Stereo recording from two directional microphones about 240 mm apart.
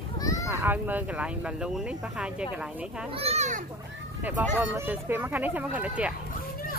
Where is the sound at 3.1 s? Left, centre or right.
Right.